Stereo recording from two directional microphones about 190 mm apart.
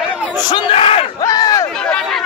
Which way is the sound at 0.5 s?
25° left (ahead or behind).